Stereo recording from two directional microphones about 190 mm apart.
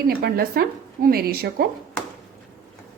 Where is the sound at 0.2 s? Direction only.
55° right (ahead or behind).